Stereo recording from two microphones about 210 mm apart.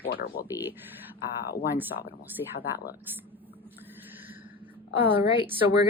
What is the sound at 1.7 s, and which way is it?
Speech, 10° right (ahead or behind).